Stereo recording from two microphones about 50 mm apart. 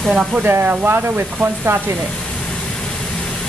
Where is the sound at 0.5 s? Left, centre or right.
Right.